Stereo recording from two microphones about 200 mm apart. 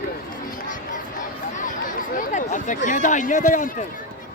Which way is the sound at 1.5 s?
40° left (ahead or behind).